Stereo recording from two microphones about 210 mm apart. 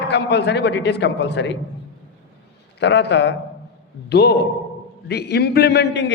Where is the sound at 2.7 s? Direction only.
55° left (ahead or behind).